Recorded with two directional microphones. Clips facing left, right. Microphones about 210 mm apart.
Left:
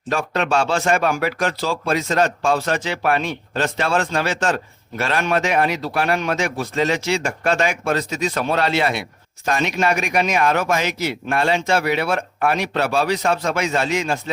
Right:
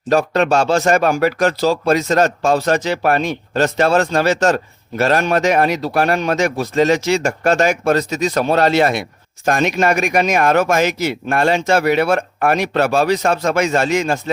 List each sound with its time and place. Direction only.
0.1 s speech: 40° right (ahead or behind)